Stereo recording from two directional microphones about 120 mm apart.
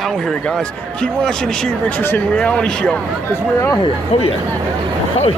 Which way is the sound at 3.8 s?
50° left (ahead or behind).